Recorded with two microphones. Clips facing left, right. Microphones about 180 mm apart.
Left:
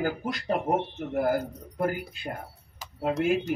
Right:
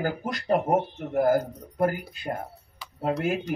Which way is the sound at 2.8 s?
45° left (ahead or behind).